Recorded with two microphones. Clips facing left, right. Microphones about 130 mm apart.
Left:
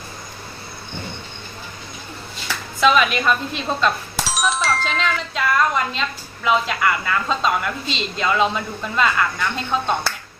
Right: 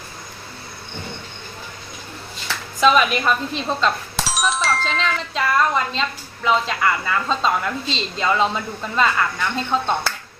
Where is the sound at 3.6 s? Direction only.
5° left (ahead or behind).